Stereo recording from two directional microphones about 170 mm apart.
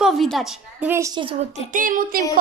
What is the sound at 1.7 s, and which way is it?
Speech, 50° right (ahead or behind).